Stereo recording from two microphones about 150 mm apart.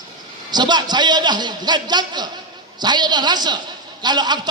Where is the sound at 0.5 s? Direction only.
30° right (ahead or behind).